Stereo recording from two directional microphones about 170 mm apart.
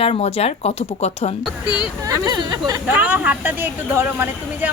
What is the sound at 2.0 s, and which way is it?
Speech, 25° right (ahead or behind).